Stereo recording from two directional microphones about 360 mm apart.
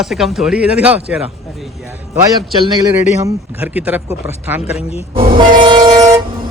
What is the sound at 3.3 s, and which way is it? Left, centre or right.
Speech, centre.